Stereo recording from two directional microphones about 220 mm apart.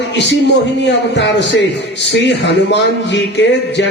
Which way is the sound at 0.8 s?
50° left (ahead or behind).